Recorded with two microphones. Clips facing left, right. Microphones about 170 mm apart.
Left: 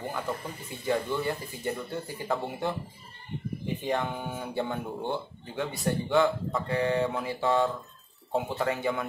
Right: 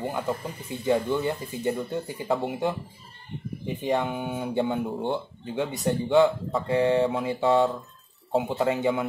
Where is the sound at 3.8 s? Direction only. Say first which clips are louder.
Right 5 dB; 15° right (ahead or behind).